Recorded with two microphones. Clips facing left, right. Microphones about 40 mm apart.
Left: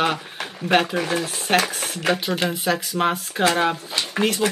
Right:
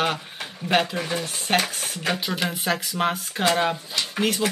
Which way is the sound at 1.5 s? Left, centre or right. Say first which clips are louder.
Left 3 dB; centre.